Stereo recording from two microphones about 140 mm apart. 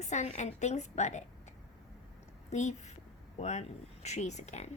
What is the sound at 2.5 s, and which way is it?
A woman's voice, 55° left (ahead or behind).